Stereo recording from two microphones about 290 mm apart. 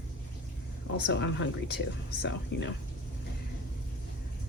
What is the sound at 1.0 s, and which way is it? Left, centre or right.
A woman's voice, left.